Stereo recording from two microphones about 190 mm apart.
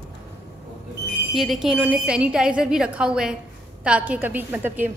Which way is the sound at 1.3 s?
Centre (ahead or behind).